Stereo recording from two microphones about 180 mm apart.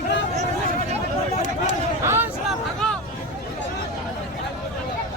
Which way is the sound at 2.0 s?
15° right (ahead or behind).